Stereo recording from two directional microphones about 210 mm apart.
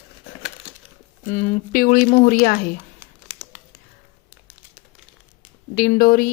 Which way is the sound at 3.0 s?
5° right (ahead or behind).